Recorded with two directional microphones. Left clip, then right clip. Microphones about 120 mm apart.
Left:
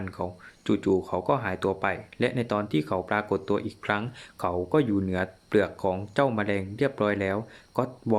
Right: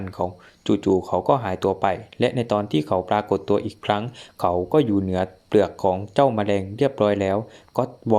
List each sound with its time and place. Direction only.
0.0 s speech: 25° right (ahead or behind)